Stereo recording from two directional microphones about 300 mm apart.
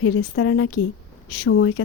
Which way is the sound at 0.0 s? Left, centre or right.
Left.